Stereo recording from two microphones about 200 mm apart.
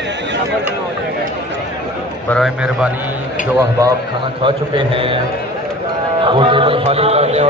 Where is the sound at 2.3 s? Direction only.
Centre (ahead or behind).